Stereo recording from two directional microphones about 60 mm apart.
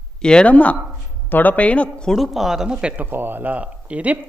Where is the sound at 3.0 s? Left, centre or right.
Right.